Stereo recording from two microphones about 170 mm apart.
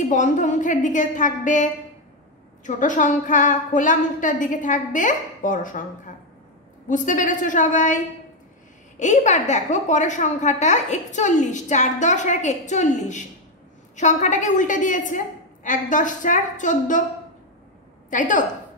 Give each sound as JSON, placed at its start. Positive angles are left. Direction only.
{"t": 0.1, "sound": "a woman's voice", "side_deg": 45}
{"t": 9.0, "sound": "a woman's voice", "side_deg": 45}
{"t": 18.1, "sound": "a woman's voice", "side_deg": 50}